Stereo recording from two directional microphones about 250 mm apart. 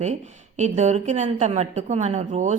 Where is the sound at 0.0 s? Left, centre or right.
Right.